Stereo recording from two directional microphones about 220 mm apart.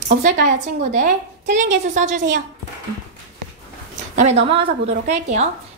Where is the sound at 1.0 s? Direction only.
35° right (ahead or behind).